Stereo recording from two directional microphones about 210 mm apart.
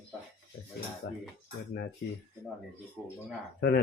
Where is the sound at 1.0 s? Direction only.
55° left (ahead or behind).